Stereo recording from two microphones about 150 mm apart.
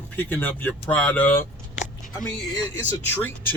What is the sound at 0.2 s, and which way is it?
Speech, 10° left (ahead or behind).